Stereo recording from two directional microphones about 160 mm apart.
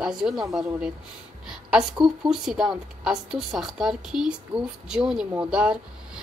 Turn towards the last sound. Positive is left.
turn(degrees=-5)  # may be behind; listen again after turning